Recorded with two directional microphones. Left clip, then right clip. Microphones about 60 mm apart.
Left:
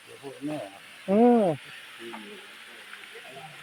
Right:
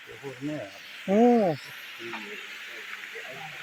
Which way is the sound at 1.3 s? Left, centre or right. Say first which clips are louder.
Left 1 dB; left.